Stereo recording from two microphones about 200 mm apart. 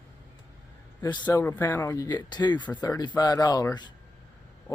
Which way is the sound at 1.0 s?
20° left (ahead or behind).